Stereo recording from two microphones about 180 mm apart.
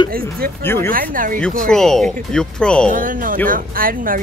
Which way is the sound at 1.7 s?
Centre (ahead or behind).